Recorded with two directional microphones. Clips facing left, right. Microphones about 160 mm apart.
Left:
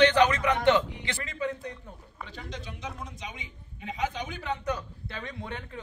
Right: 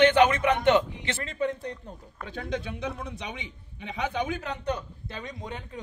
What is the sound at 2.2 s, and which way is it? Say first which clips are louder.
A man's voice: right 10 dB; 55° right (ahead or behind).